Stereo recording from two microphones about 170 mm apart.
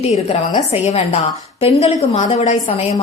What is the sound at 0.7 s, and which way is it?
A woman's voice, 35° left (ahead or behind).